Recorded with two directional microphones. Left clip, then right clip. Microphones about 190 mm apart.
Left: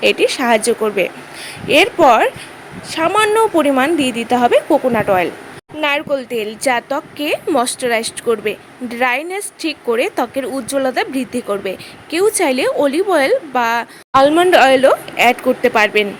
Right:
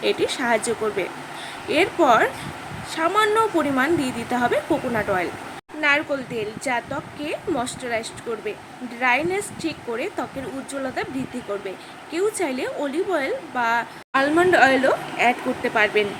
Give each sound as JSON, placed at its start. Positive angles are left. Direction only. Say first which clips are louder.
{"t": 0.0, "sound": "a woman's voice", "louder": "left 8 dB", "side_deg": 45}
{"t": 12.1, "sound": "a woman's voice", "louder": "left 9 dB", "side_deg": 55}
{"t": 14.1, "sound": "a woman's voice", "louder": "left 10 dB", "side_deg": 35}
{"t": 14.3, "sound": "a woman's voice", "louder": "left 6 dB", "side_deg": 55}